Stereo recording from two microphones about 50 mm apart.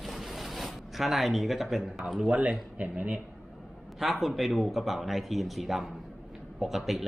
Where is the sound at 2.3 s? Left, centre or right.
Right.